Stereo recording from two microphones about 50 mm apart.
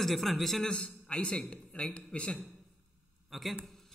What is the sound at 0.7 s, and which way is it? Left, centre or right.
A man's voice, centre.